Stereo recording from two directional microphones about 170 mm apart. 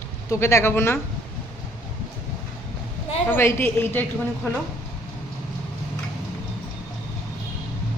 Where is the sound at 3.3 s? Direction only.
15° left (ahead or behind).